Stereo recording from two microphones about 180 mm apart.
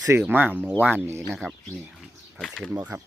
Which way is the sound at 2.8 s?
10° right (ahead or behind).